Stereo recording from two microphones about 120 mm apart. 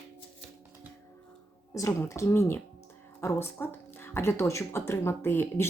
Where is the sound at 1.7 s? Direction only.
25° left (ahead or behind).